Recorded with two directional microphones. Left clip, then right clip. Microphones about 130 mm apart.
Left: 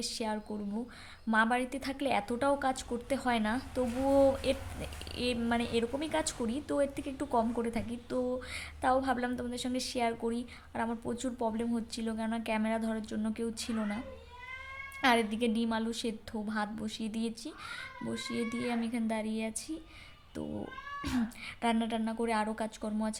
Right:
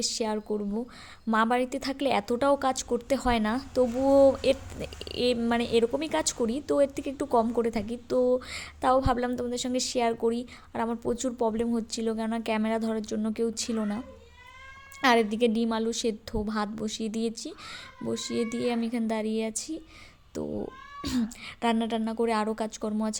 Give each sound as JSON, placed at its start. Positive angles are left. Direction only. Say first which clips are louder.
{"t": 0.0, "sound": "a woman's voice", "louder": "right 6 dB", "side_deg": -35}
{"t": 15.0, "sound": "a woman's voice", "louder": "right 6 dB", "side_deg": -40}
{"t": 21.0, "sound": "a woman's voice", "louder": "right 5 dB", "side_deg": -25}